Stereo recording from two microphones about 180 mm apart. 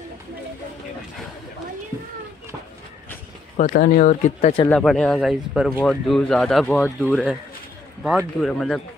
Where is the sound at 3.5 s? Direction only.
50° left (ahead or behind).